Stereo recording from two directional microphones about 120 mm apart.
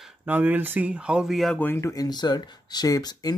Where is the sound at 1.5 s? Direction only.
20° left (ahead or behind).